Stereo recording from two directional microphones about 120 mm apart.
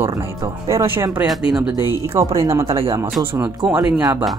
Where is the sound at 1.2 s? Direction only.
5° right (ahead or behind).